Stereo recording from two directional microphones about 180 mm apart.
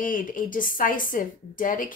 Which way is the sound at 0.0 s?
50° left (ahead or behind).